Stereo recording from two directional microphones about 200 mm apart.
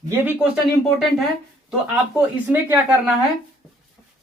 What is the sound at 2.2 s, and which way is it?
Speech, 10° right (ahead or behind).